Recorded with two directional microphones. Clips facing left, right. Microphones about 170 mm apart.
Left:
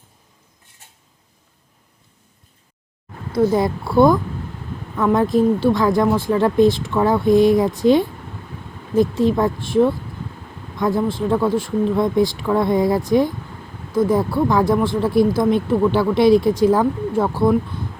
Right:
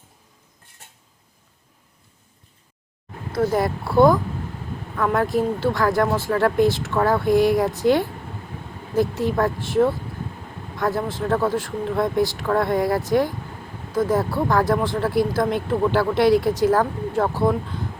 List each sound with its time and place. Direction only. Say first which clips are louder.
3.3 s speech: left 4 dB; 15° left (ahead or behind)
4.9 s speech: left 4 dB; 20° left (ahead or behind)